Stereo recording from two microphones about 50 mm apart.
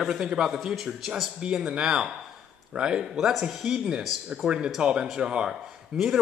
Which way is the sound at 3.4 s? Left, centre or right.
Centre.